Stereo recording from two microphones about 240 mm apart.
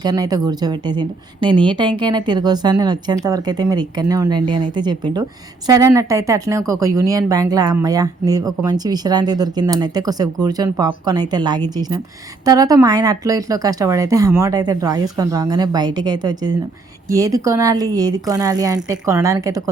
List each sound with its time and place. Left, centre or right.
0.0 s speech: centre